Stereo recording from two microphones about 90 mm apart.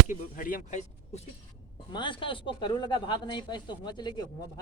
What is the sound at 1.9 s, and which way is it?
Speech, 60° left (ahead or behind).